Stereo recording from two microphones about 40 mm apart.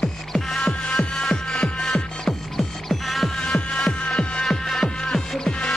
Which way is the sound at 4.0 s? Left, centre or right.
Left.